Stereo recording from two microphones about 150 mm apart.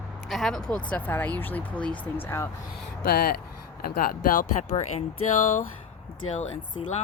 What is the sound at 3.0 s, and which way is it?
Speech, 90° left.